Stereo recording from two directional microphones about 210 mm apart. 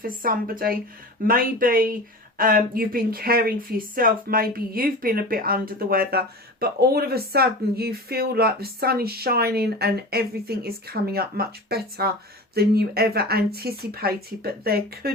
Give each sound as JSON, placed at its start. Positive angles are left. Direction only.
{"t": 0.0, "sound": "speech", "side_deg": -40}